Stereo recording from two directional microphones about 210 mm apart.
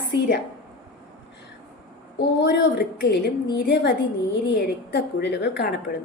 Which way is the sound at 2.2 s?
55° left (ahead or behind).